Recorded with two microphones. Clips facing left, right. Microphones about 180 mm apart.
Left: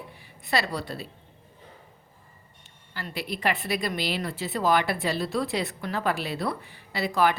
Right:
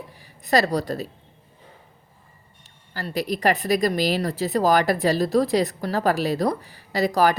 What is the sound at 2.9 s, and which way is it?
A woman's voice, 40° right (ahead or behind).